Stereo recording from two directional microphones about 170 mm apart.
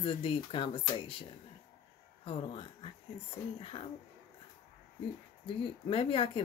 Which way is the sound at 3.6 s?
30° left (ahead or behind).